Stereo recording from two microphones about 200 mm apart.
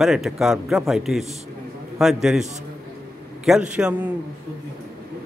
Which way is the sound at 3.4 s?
5° right (ahead or behind).